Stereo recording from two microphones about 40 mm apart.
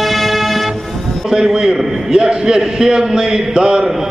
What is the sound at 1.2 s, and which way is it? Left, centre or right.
A man's voice, centre.